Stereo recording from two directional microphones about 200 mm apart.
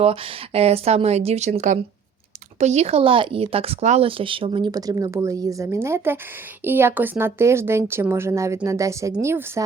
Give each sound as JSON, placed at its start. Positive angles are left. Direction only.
{"t": 0.0, "sound": "a woman's voice", "side_deg": -30}